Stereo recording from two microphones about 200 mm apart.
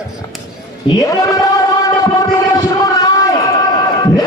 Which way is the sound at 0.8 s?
20° left (ahead or behind).